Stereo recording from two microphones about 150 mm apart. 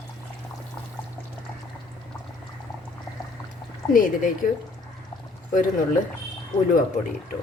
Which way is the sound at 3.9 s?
70° left (ahead or behind).